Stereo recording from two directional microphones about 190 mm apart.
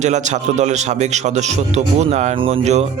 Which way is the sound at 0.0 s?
40° right (ahead or behind).